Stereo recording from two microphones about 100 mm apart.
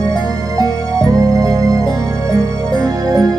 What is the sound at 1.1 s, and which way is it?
Music, 35° right (ahead or behind).